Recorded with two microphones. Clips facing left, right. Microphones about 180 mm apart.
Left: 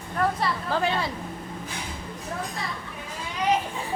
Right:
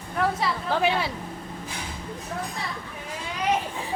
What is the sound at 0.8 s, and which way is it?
Speech, 75° right (ahead or behind).